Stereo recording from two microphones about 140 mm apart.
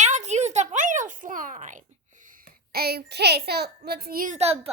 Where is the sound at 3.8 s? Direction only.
90° right.